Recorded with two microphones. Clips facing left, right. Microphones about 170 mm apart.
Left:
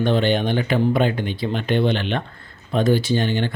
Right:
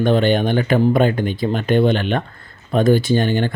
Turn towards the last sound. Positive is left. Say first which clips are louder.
# right 4 dB
turn(degrees=-50)  # may be behind; listen again after turning